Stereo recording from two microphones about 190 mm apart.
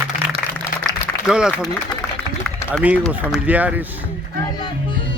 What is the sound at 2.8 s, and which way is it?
Speech, 5° right (ahead or behind).